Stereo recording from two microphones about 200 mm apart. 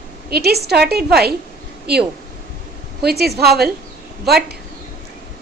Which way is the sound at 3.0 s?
55° right (ahead or behind).